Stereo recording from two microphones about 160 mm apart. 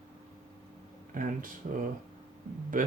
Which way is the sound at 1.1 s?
55° right (ahead or behind).